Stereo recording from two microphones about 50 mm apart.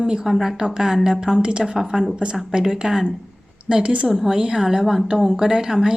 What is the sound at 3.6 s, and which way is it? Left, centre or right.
Speech, right.